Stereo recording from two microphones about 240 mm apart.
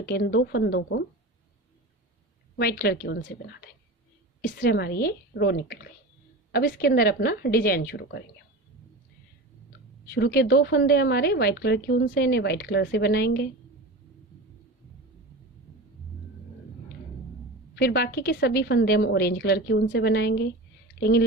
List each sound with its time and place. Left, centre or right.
0.0 s a woman's voice: left
2.6 s a woman's voice: left
4.4 s a woman's voice: left
10.2 s a woman's voice: left
17.7 s a woman's voice: left